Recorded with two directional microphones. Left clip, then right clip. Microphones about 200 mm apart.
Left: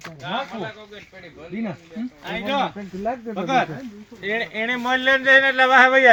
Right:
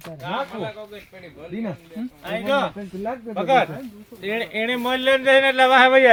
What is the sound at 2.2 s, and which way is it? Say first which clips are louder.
Speech: right 2 dB; 40° right (ahead or behind).